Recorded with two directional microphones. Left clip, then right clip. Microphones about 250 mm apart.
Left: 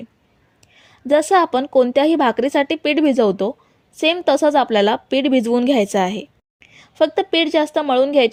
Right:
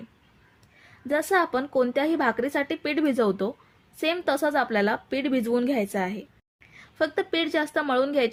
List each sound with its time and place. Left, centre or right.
0.9 s a woman's voice: left